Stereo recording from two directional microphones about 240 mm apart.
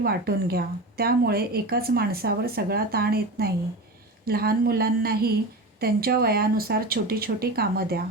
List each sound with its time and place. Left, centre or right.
0.0 s a woman's voice: right